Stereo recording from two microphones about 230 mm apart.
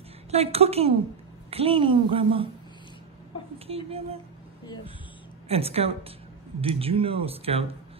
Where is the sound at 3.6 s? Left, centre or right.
Right.